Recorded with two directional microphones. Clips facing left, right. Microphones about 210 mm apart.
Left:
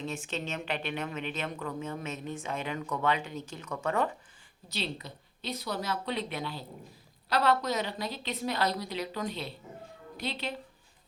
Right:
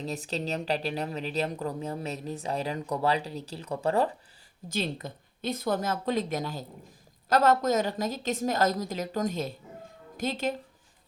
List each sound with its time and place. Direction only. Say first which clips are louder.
0.0 s speech: right 3 dB; 35° right (ahead or behind)
4.7 s a woman's voice: right 5 dB; 50° right (ahead or behind)